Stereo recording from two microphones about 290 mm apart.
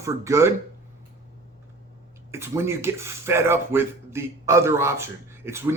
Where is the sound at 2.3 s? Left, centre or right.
Centre.